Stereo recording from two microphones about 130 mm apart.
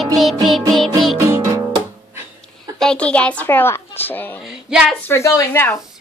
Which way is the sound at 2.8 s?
5° left (ahead or behind).